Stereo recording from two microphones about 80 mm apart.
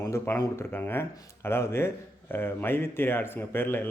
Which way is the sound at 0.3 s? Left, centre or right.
Left.